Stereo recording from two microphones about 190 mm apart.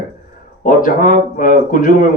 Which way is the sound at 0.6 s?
45° left (ahead or behind).